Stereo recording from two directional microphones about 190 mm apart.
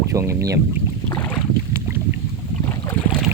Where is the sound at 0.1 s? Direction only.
15° right (ahead or behind).